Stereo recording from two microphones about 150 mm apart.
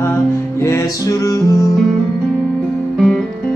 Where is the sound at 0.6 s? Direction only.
20° left (ahead or behind).